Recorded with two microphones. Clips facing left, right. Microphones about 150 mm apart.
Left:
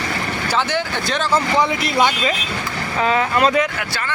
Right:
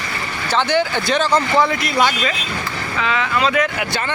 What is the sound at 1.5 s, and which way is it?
Speech, 20° left (ahead or behind).